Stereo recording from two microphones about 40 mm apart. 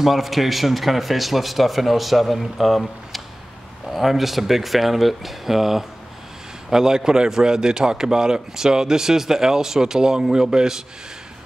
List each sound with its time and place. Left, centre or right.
0.0 s a man's voice: centre